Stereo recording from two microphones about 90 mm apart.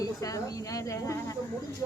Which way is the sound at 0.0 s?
40° left (ahead or behind).